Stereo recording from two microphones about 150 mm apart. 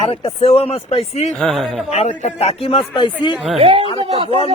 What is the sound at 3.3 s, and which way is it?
Speech, 5° right (ahead or behind).